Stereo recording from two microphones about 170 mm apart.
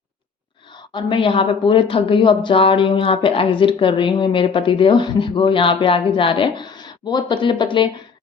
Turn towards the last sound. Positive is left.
turn(degrees=30)  # may be behind; listen again after turning